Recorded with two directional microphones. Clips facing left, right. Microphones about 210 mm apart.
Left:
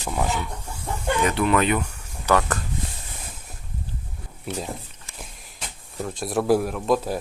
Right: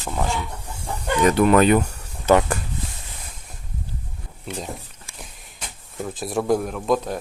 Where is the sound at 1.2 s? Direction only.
40° right (ahead or behind).